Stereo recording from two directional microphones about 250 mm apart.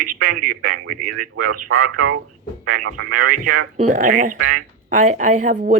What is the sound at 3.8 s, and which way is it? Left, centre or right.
A woman's voice, right.